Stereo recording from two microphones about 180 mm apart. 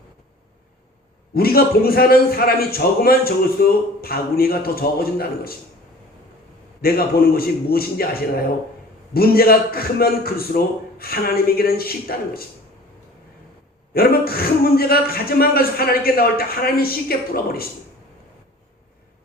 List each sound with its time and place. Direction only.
1.3 s a man's voice: 55° left (ahead or behind)
6.8 s a man's voice: 55° left (ahead or behind)
13.9 s a man's voice: 55° left (ahead or behind)